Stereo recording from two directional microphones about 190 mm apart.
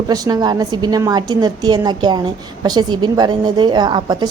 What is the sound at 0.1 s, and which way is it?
A woman's voice, 20° right (ahead or behind).